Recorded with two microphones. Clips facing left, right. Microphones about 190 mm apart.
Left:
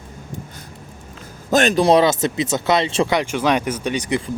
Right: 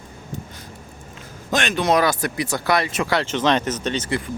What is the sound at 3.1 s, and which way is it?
Speech, 10° left (ahead or behind).